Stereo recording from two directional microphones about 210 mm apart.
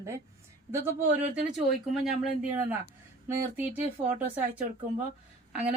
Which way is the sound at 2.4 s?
10° right (ahead or behind).